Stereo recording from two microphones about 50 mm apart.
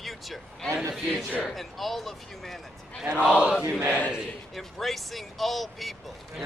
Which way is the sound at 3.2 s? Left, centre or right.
Centre.